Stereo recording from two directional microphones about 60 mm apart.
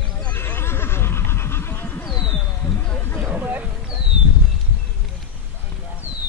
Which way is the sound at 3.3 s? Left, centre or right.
Right.